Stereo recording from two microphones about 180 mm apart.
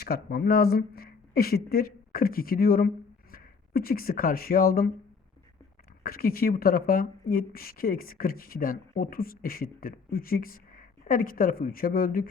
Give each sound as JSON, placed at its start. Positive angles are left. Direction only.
{"t": 0.0, "sound": "speech", "side_deg": 60}
{"t": 6.0, "sound": "speech", "side_deg": 55}